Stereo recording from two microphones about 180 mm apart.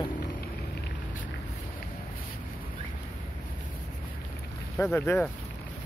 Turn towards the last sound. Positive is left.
turn(degrees=10)  # may be behind; listen again after turning